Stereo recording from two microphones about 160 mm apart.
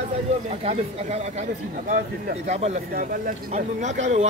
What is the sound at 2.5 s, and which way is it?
Speech, 40° right (ahead or behind).